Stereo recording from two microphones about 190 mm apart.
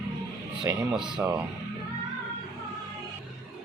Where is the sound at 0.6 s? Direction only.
10° right (ahead or behind).